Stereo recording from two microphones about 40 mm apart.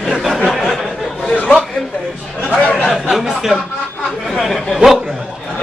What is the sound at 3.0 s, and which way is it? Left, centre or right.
Speech, centre.